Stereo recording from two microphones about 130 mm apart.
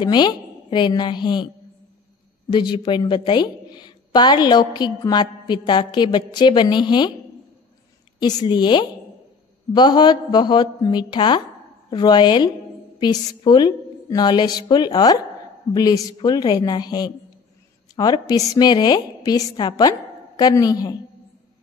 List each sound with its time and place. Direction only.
0.0 s a woman's voice: 35° left (ahead or behind)
2.5 s a woman's voice: 35° left (ahead or behind)
8.2 s a woman's voice: 30° left (ahead or behind)